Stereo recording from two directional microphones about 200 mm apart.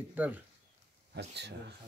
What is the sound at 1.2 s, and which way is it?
Speech, 60° right (ahead or behind).